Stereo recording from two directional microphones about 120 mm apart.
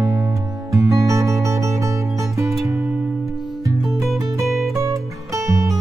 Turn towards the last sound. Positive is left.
turn(degrees=-25)  # may be behind; listen again after turning